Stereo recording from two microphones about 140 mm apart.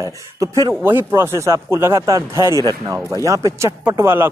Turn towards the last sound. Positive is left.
turn(degrees=-20)  # may be behind; listen again after turning